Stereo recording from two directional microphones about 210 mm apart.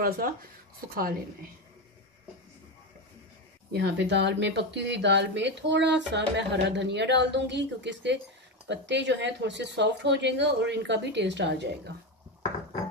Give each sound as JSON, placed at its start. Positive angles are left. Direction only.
{"t": 0.0, "sound": "speech", "side_deg": -45}
{"t": 3.7, "sound": "speech", "side_deg": -55}